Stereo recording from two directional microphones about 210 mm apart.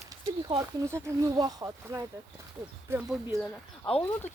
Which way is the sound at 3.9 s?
25° left (ahead or behind).